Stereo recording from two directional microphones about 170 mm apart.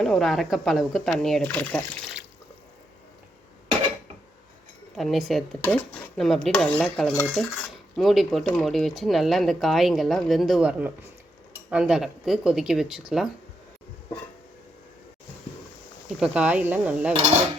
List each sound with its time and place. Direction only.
0.0 s speech: centre (ahead or behind)
4.9 s speech: centre (ahead or behind)
16.2 s speech: 5° right (ahead or behind)